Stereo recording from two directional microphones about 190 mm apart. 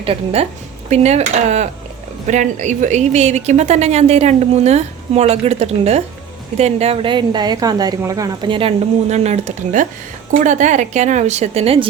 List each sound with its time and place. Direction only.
0.0 s a woman's voice: 30° right (ahead or behind)